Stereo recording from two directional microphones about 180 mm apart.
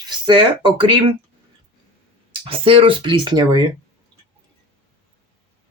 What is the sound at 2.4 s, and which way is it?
Speech, 30° right (ahead or behind).